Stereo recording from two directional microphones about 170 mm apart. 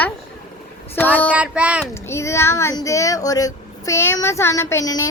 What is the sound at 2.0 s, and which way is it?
Speech, 15° left (ahead or behind).